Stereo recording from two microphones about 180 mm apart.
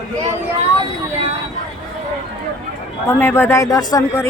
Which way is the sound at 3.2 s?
10° left (ahead or behind).